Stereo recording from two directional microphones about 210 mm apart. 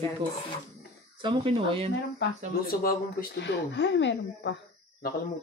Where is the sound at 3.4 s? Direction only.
55° left (ahead or behind).